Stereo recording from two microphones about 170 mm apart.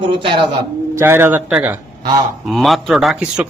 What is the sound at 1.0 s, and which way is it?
Speech, 15° right (ahead or behind).